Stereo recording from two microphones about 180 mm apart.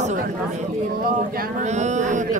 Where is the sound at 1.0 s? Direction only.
50° right (ahead or behind).